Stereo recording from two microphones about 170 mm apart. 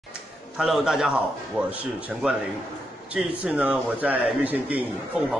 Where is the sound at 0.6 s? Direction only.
5° right (ahead or behind).